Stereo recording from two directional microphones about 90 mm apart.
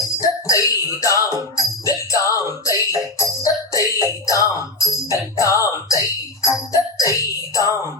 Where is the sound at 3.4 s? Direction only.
40° left (ahead or behind).